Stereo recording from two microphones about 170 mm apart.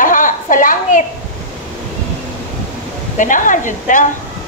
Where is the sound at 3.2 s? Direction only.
50° left (ahead or behind).